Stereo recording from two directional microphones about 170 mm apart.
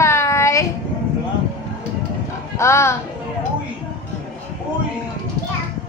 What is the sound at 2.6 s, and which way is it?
Music, 15° left (ahead or behind).